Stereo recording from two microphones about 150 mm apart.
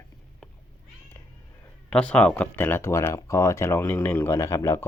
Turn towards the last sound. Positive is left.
turn(degrees=20)  # may be behind; listen again after turning